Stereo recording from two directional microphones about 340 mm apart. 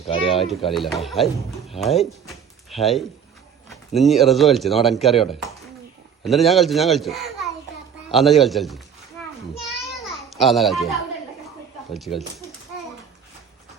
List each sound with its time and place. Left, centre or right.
0.1 s speech: centre
0.7 s speech: centre
9.6 s children playing: centre
11.9 s speech: centre